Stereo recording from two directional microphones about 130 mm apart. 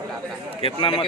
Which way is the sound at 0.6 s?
45° left (ahead or behind).